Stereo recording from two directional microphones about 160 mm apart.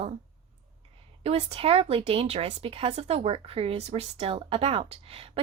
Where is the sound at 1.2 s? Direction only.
40° right (ahead or behind).